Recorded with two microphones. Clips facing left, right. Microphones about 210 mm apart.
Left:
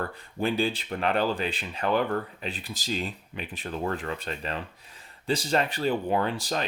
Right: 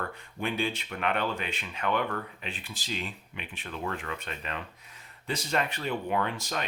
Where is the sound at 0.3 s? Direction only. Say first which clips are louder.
Left 5 dB; 35° left (ahead or behind).